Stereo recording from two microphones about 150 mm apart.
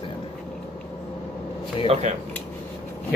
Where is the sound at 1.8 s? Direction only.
45° right (ahead or behind).